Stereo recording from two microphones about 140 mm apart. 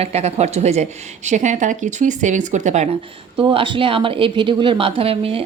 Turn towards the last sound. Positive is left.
turn(degrees=-40)  # may be behind; listen again after turning